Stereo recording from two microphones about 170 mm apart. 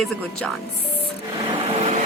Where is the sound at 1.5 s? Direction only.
35° right (ahead or behind).